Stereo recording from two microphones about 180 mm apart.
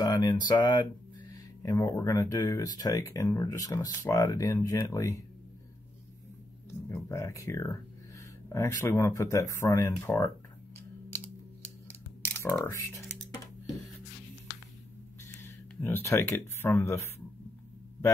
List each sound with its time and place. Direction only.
0.0 s speech: 20° left (ahead or behind)
6.9 s speech: 15° left (ahead or behind)
12.2 s speech: 10° left (ahead or behind)
15.4 s speech: 15° left (ahead or behind)